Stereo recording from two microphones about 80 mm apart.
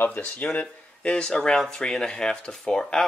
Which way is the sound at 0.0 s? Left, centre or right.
Centre.